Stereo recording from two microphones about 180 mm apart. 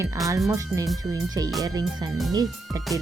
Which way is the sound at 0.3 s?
15° right (ahead or behind).